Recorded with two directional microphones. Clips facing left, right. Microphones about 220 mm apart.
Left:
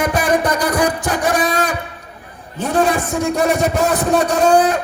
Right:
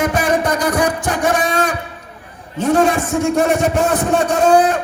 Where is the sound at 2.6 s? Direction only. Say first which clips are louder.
Right 2 dB; 35° left (ahead or behind).